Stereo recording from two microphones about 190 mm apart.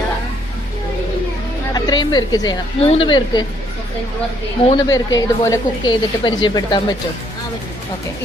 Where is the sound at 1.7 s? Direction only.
20° left (ahead or behind).